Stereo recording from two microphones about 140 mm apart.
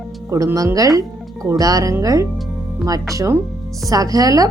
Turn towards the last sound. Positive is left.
turn(degrees=-25)  # may be behind; listen again after turning